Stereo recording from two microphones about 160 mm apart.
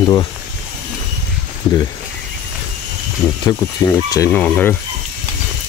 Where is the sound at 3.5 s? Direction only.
20° left (ahead or behind).